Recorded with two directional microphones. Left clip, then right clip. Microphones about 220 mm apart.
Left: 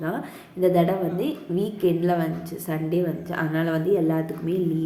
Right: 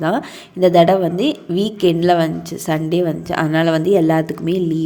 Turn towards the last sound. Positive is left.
turn(degrees=-40)  # may be behind; listen again after turning